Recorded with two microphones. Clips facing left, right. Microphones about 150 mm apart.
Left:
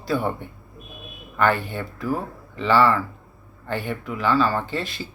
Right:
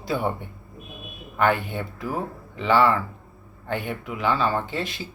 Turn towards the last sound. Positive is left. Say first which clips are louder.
# left 1 dB
turn(degrees=-15)  # may be behind; listen again after turning